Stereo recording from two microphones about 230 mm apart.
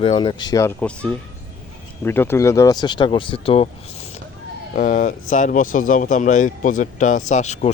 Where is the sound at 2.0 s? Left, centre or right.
Centre.